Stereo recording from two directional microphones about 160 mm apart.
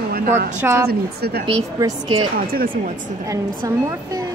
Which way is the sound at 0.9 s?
75° right (ahead or behind).